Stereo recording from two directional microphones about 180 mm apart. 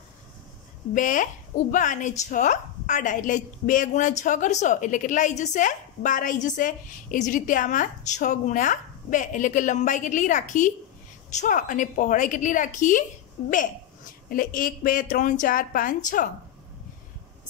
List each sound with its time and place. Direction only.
0.9 s speech: 45° left (ahead or behind)
14.3 s speech: 50° left (ahead or behind)